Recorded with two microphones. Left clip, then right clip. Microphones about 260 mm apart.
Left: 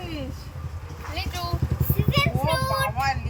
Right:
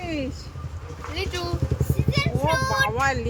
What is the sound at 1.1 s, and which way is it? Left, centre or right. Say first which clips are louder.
Speech: right 2 dB; centre.